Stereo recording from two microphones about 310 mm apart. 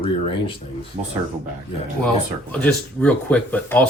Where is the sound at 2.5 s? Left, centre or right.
Centre.